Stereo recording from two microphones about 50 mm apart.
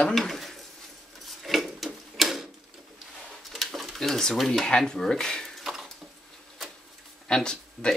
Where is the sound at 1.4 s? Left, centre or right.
Centre.